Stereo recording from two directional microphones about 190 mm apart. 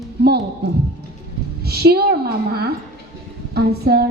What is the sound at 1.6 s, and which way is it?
A woman's voice, 55° right (ahead or behind).